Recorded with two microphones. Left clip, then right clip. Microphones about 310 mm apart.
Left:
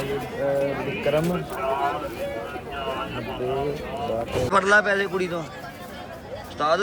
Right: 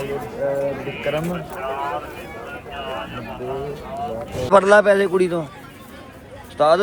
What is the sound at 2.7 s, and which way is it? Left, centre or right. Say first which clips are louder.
Vehicle: even; right.